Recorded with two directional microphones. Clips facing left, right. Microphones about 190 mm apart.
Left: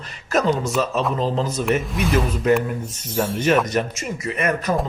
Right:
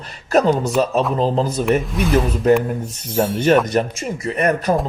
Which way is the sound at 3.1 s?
30° right (ahead or behind).